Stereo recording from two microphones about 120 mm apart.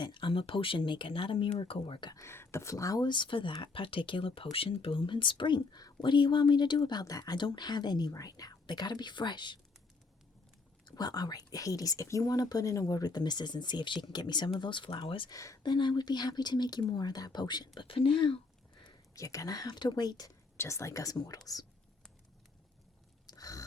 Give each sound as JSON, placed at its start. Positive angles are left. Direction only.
{"t": 0.0, "sound": "speech", "side_deg": 40}
{"t": 2.1, "sound": "speech", "side_deg": 20}
{"t": 10.8, "sound": "speech", "side_deg": 35}
{"t": 15.3, "sound": "speech", "side_deg": 30}
{"t": 17.7, "sound": "speech", "side_deg": 45}
{"t": 18.8, "sound": "a woman's voice", "side_deg": 30}
{"t": 23.2, "sound": "a sound", "side_deg": 30}